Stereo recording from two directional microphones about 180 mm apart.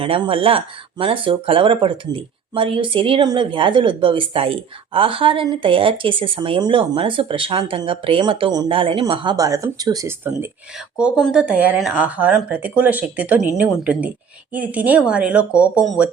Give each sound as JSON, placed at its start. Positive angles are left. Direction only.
{"t": 0.0, "sound": "speech", "side_deg": -30}
{"t": 11.2, "sound": "a woman's voice", "side_deg": -5}